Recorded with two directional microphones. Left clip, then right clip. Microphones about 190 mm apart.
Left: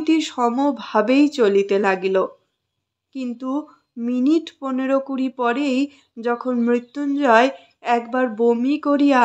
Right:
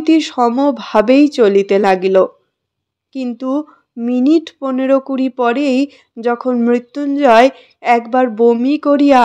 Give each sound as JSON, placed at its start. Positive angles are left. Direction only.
{"t": 0.0, "sound": "speech", "side_deg": -35}